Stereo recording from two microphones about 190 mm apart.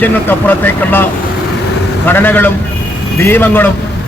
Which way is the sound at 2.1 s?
10° left (ahead or behind).